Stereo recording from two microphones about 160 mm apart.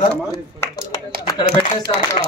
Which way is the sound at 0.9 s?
25° left (ahead or behind).